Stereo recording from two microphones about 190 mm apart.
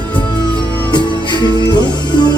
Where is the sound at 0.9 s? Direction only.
25° left (ahead or behind).